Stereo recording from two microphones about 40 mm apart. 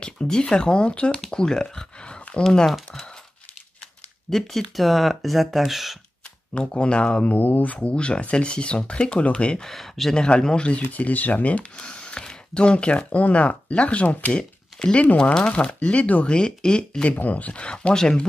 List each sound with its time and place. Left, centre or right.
0.0 s speech: left
1.3 s a sound: centre
2.4 s speech: centre
4.3 s speech: centre
6.7 s speech: left
7.3 s speech: left
7.7 s speech: left
9.6 s speech: centre
10.1 s speech: left
11.7 s speech: left
16.3 s speech: left
17.2 s speech: left
17.9 s speech: centre